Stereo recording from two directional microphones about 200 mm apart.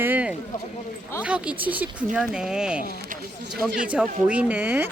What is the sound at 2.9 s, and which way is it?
Speech, 50° right (ahead or behind).